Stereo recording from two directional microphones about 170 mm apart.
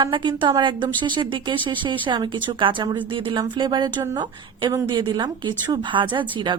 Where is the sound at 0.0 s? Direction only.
25° right (ahead or behind).